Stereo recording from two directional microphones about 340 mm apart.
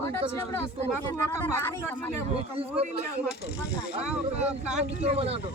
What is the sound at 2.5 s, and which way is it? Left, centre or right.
Speech, centre.